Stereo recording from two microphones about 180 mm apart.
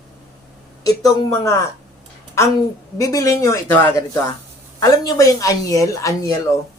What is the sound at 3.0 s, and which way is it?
Speech, 20° left (ahead or behind).